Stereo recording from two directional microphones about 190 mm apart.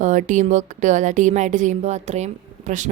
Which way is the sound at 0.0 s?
40° right (ahead or behind).